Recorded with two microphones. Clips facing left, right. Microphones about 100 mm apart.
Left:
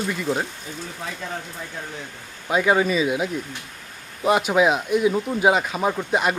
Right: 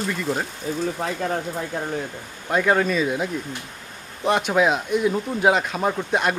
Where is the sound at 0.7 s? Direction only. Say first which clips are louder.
Right 9 dB; 45° right (ahead or behind).